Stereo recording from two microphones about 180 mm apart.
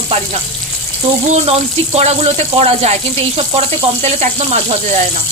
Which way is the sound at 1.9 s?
35° right (ahead or behind).